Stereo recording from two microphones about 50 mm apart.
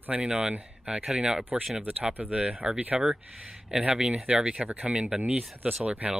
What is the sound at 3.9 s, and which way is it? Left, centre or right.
Speech, centre.